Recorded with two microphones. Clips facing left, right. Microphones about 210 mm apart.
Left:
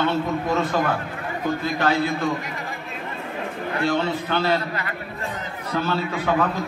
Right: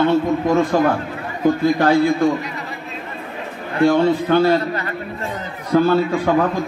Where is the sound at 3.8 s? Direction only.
45° right (ahead or behind).